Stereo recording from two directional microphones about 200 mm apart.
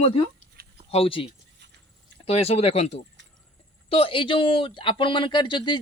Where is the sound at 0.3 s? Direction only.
50° right (ahead or behind).